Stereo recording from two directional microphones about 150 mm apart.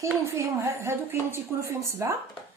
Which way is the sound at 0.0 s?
20° right (ahead or behind).